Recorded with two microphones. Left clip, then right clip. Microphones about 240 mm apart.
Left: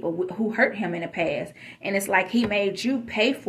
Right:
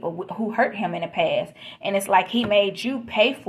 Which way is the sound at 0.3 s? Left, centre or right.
Right.